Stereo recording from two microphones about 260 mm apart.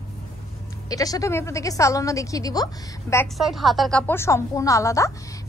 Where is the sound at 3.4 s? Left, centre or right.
Centre.